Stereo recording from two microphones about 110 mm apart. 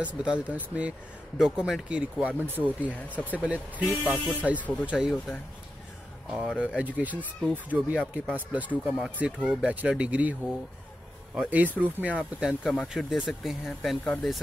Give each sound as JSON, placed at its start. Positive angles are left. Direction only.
{"t": 0.0, "sound": "speech", "side_deg": -10}
{"t": 3.2, "sound": "speech", "side_deg": 15}
{"t": 3.4, "sound": "speech", "side_deg": -15}
{"t": 6.3, "sound": "speech", "side_deg": -5}
{"t": 14.0, "sound": "speech", "side_deg": 10}